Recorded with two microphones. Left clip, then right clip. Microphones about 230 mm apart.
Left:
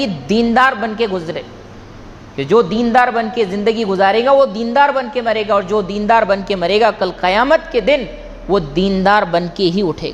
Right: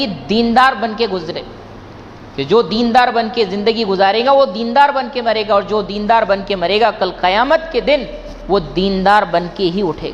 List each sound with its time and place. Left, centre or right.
0.0 s a woman's voice: left